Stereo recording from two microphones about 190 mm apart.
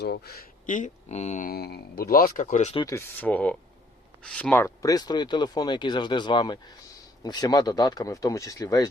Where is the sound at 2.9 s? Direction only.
10° left (ahead or behind).